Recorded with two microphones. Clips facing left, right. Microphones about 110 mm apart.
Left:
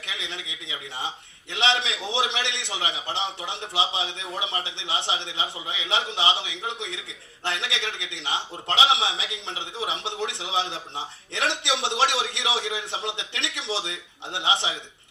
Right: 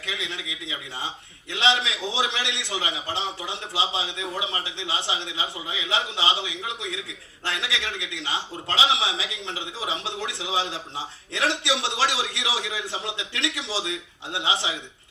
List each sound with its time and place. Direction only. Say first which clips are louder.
1.5 s a man's voice: right 1 dB; 20° left (ahead or behind)